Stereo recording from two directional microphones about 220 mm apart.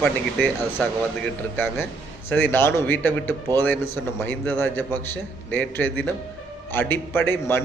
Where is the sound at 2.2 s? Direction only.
10° left (ahead or behind).